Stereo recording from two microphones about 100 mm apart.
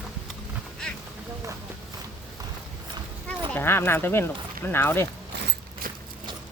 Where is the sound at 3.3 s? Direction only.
20° left (ahead or behind).